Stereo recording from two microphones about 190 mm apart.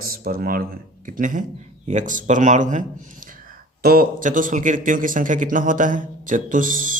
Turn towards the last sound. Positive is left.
turn(degrees=-45)  # may be behind; listen again after turning